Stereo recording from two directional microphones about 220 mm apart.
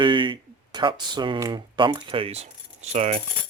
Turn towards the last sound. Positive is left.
turn(degrees=-30)  # may be behind; listen again after turning